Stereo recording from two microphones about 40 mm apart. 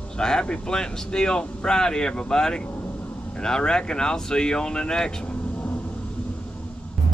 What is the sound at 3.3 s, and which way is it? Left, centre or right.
Speech, left.